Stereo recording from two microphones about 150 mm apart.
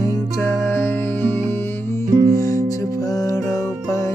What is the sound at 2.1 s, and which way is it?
Music, 55° right (ahead or behind).